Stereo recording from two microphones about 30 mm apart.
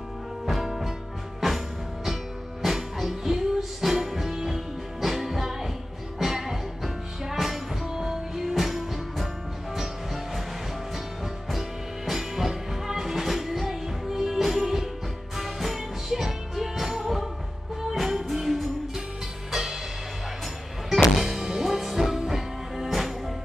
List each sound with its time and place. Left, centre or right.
0.5 s music: centre
2.6 s music: centre
7.8 s music: centre
12.1 s music: centre
20.9 s music: centre